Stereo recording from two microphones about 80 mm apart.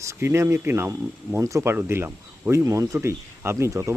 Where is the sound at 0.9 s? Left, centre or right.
Right.